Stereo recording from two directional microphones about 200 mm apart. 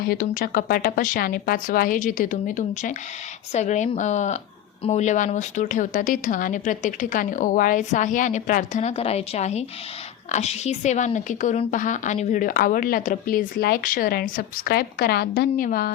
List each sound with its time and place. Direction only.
0.0 s a woman's voice: 45° left (ahead or behind)